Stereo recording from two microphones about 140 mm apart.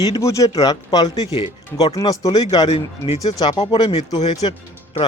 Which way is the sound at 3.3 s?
25° left (ahead or behind).